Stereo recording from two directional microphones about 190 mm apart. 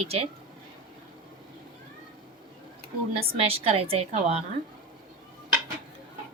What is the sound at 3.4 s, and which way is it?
Speech, 30° right (ahead or behind).